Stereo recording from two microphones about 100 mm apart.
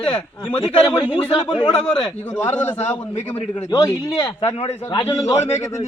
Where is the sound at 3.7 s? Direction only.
40° left (ahead or behind).